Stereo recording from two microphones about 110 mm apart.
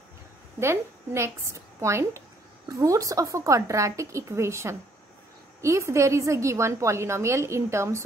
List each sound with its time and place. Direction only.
0.6 s a woman's voice: 25° right (ahead or behind)